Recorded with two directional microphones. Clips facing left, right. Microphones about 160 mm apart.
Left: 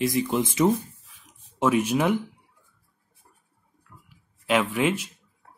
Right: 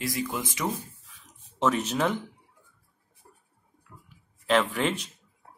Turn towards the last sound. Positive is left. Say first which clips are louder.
# left 2 dB
turn(degrees=10)  # may be behind; listen again after turning